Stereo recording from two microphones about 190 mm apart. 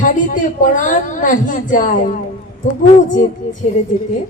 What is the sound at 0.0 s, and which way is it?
Speech, 40° left (ahead or behind).